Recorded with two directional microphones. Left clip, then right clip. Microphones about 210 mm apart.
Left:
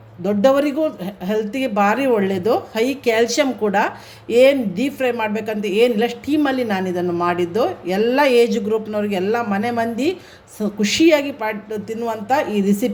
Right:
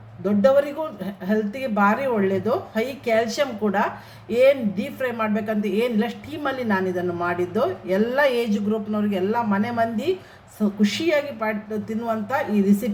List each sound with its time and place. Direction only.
0.4 s speech: 40° left (ahead or behind)